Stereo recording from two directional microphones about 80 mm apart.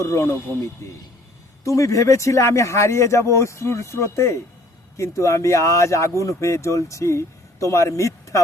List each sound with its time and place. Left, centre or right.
0.0 s speech: left